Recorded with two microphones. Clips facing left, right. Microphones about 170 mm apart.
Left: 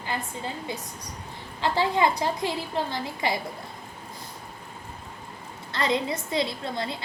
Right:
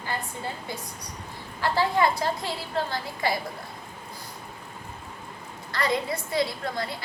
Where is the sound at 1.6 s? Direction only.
20° left (ahead or behind).